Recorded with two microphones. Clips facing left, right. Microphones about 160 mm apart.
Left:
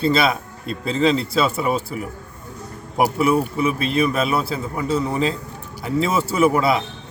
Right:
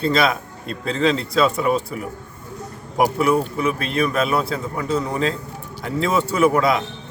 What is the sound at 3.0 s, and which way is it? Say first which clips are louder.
A man's voice: even; 5° left (ahead or behind).